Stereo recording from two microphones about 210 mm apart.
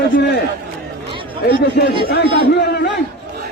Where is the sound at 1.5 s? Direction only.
50° left (ahead or behind).